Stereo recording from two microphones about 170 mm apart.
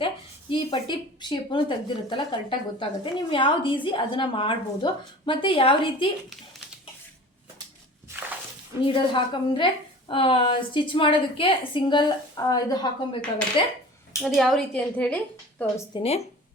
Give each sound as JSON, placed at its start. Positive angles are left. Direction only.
{"t": 0.5, "sound": "a woman's voice", "side_deg": 30}
{"t": 8.8, "sound": "a woman's voice", "side_deg": 30}
{"t": 14.2, "sound": "a woman's voice", "side_deg": 0}
{"t": 16.0, "sound": "speech", "side_deg": 35}